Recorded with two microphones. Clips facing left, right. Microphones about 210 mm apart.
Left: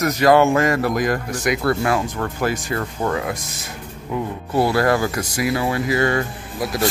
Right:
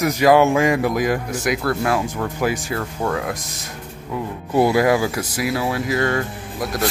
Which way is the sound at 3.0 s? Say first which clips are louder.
Even; centre (ahead or behind).